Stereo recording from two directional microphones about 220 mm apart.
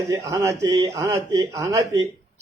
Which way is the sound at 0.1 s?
15° right (ahead or behind).